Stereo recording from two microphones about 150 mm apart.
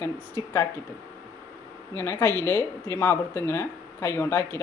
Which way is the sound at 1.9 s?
15° left (ahead or behind).